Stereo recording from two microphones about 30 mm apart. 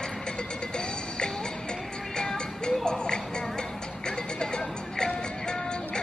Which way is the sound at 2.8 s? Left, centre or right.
Left.